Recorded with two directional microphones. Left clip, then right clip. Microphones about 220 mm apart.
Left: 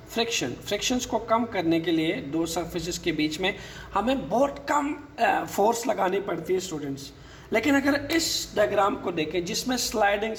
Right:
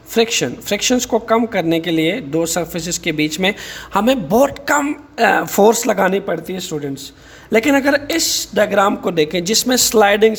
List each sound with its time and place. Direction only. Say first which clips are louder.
0.1 s a woman's voice: right 11 dB; 45° right (ahead or behind)